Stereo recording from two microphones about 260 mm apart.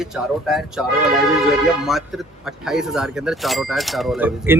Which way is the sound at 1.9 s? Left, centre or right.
Centre.